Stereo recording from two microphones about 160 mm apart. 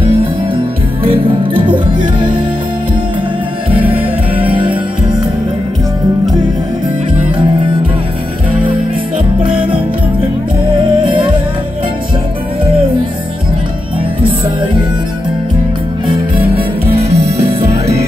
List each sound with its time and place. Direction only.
1.0 s music: 30° right (ahead or behind)
3.7 s music: 35° right (ahead or behind)
11.0 s music: 30° right (ahead or behind)
16.1 s music: 35° right (ahead or behind)